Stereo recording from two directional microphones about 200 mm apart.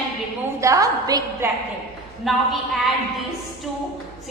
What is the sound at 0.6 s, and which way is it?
Speech, 15° right (ahead or behind).